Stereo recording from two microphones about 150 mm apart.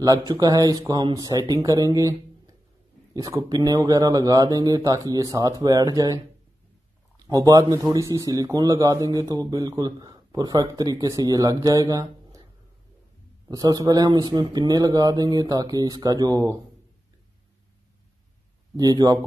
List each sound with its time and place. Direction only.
0.0 s speech: 25° right (ahead or behind)
7.2 s speech: 25° right (ahead or behind)
13.5 s speech: 25° right (ahead or behind)
18.8 s speech: 25° right (ahead or behind)